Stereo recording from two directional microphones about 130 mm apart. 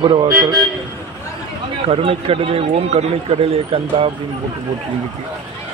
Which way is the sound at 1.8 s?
45° right (ahead or behind).